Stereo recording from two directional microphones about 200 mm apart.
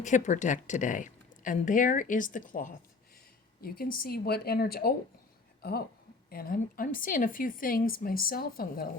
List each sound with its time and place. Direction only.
0.0 s a woman's voice: 40° left (ahead or behind)
6.3 s a woman's voice: 50° left (ahead or behind)